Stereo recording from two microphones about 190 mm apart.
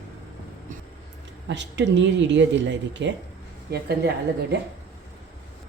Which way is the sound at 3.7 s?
60° right (ahead or behind).